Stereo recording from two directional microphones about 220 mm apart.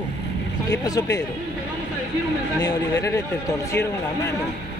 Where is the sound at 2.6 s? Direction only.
15° left (ahead or behind).